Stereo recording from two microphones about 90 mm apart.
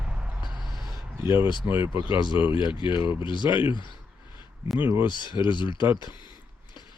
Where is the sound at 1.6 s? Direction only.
40° right (ahead or behind).